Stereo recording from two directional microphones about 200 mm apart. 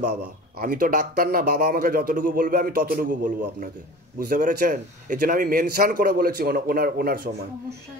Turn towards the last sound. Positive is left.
turn(degrees=-50)  # may be behind; listen again after turning